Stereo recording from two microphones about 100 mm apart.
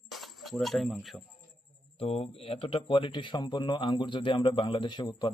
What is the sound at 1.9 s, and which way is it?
Speech, 75° left (ahead or behind).